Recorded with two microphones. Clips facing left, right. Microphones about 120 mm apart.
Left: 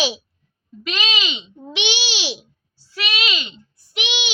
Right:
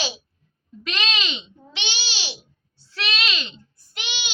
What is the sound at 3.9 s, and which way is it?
Speech, 80° left.